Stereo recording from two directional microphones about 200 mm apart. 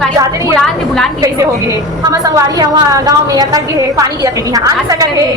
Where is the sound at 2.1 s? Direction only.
15° right (ahead or behind).